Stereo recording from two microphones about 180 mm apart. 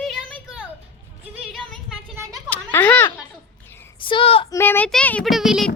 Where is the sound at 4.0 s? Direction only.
30° left (ahead or behind).